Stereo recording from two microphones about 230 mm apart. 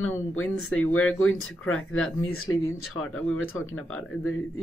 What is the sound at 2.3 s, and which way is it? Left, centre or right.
Speech, left.